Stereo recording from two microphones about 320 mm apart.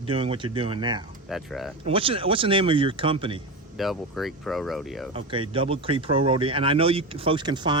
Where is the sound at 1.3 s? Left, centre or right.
Centre.